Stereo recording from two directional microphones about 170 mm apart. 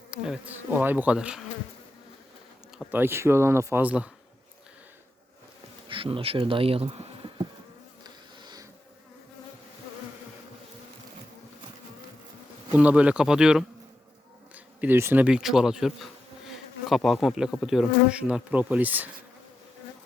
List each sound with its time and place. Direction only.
0.1 s speech: 5° right (ahead or behind)
2.7 s speech: 10° right (ahead or behind)
5.9 s speech: 30° right (ahead or behind)
8.0 s insect: 25° right (ahead or behind)
12.7 s bee: 10° right (ahead or behind)
14.5 s speech: 10° right (ahead or behind)
16.5 s bee: centre (ahead or behind)